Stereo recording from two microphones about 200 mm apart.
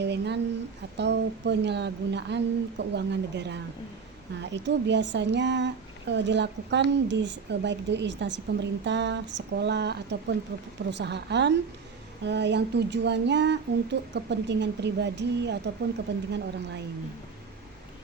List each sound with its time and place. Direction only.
0.0 s speech: 55° right (ahead or behind)